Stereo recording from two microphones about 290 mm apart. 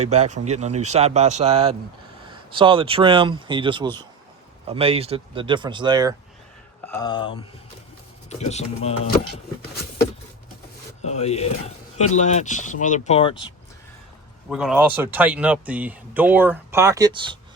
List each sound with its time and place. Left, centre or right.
0.1 s a man's voice: right
6.8 s speech: centre
11.0 s speech: left
14.5 s speech: centre